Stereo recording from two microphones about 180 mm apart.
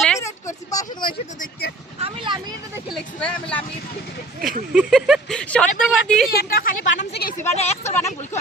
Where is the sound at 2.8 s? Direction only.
5° left (ahead or behind).